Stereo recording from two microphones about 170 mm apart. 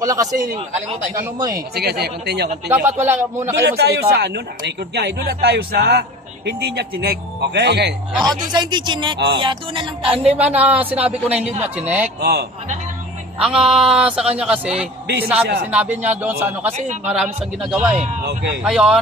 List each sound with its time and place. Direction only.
0.0 s speech: 20° right (ahead or behind)
1.8 s speech: 70° right (ahead or behind)
2.7 s speech: 10° right (ahead or behind)
3.6 s speech: 75° right (ahead or behind)
8.5 s speech: 25° right (ahead or behind)
10.3 s speech: 10° right (ahead or behind)
12.2 s speech: 75° right (ahead or behind)
13.4 s speech: 5° right (ahead or behind)
15.4 s speech: 70° right (ahead or behind)
15.7 s speech: 10° right (ahead or behind)
16.7 s a man's voice: 45° right (ahead or behind)
17.2 s speech: 5° right (ahead or behind)